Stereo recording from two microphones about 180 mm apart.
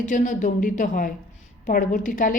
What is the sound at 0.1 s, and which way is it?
Speech, 45° left (ahead or behind).